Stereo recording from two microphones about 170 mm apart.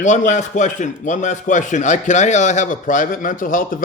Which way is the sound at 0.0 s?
45° left (ahead or behind).